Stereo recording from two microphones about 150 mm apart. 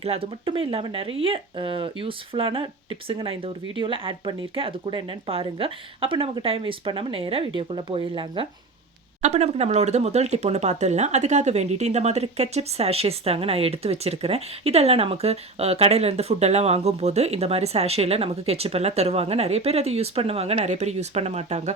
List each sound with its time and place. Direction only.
0.0 s speech: 40° right (ahead or behind)
9.2 s speech: 50° right (ahead or behind)